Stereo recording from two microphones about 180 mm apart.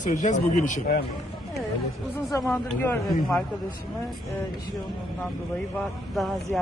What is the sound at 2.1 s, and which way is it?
Speech, 15° left (ahead or behind).